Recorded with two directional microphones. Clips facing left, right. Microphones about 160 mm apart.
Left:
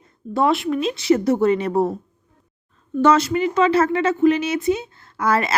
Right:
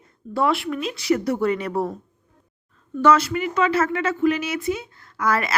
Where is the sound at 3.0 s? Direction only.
25° left (ahead or behind).